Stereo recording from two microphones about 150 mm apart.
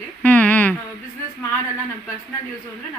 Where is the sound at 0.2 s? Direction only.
10° left (ahead or behind).